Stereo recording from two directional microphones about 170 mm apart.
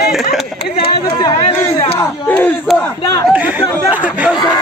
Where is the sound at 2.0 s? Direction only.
10° left (ahead or behind).